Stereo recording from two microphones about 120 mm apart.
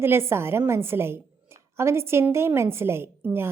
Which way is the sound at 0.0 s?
20° right (ahead or behind).